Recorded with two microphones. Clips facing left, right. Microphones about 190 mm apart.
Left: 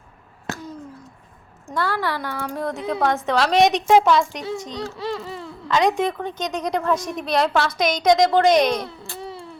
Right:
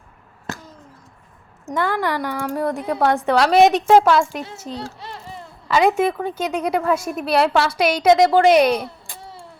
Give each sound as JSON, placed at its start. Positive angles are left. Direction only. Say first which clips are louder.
{"t": 1.6, "sound": "a woman's voice", "louder": "right 3 dB", "side_deg": -20}
{"t": 4.9, "sound": "a sound", "louder": "left 7 dB", "side_deg": 90}
{"t": 5.6, "sound": "a woman's voice", "louder": "right 3 dB", "side_deg": -5}